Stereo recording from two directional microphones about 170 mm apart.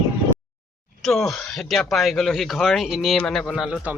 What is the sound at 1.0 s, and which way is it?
Speech, centre (ahead or behind).